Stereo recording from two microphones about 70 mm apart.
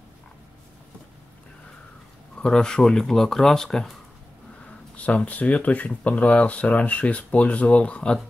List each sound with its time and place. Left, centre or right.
2.3 s speech: centre
4.9 s speech: centre